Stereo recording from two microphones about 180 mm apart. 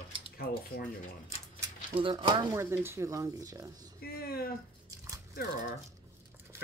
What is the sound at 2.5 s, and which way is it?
Speech, 15° right (ahead or behind).